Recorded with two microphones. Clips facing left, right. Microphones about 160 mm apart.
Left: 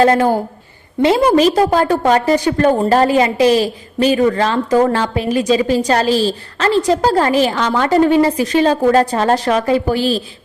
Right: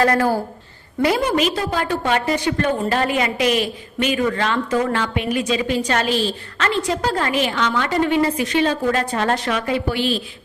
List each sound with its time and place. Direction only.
0.0 s a woman's voice: 25° left (ahead or behind)
1.2 s a woman's voice: 35° left (ahead or behind)